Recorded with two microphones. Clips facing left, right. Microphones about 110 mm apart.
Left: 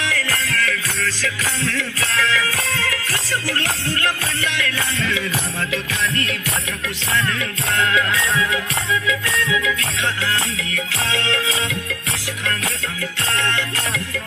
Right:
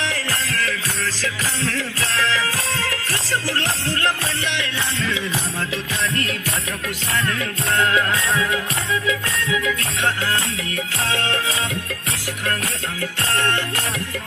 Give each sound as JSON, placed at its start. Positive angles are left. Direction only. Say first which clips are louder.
{"t": 0.0, "sound": "music", "louder": "left 1 dB", "side_deg": -35}
{"t": 7.9, "sound": "music", "louder": "even", "side_deg": -40}
{"t": 13.0, "sound": "music", "louder": "right 2 dB", "side_deg": -50}